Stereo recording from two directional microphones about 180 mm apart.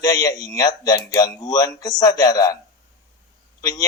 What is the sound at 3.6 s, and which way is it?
Speech, 20° left (ahead or behind).